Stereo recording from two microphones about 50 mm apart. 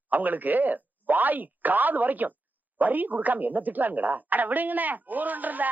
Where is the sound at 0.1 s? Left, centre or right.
Right.